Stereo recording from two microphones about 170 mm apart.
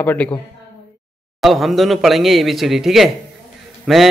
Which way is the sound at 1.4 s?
Centre (ahead or behind).